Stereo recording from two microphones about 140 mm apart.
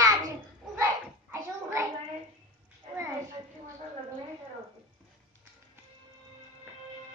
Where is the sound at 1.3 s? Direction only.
20° right (ahead or behind).